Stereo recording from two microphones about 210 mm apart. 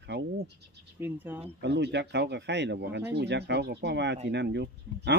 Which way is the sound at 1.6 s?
55° right (ahead or behind).